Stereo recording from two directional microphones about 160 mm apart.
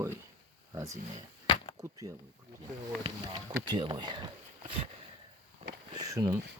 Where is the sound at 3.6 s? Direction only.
30° right (ahead or behind).